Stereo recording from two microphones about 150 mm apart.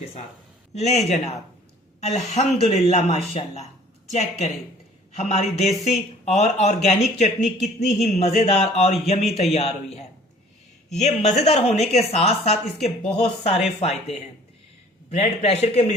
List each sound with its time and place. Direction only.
0.7 s speech: 45° left (ahead or behind)
11.3 s speech: 45° left (ahead or behind)